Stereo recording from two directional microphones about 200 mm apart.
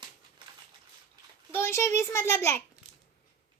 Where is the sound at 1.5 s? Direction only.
15° left (ahead or behind).